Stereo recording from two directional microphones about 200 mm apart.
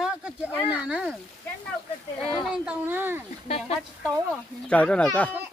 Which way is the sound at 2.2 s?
Centre (ahead or behind).